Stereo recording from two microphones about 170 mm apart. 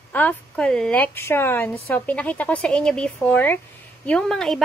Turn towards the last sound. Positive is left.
turn(degrees=5)  # may be behind; listen again after turning